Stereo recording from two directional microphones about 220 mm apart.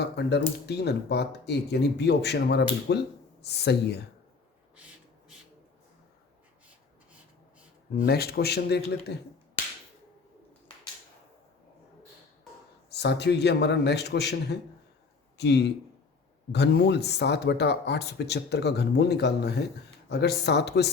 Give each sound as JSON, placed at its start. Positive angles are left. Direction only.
{"t": 0.0, "sound": "speech", "side_deg": 50}
{"t": 7.9, "sound": "speech", "side_deg": 45}
{"t": 12.9, "sound": "speech", "side_deg": 50}